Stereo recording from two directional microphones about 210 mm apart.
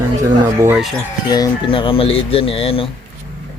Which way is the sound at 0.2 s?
10° right (ahead or behind).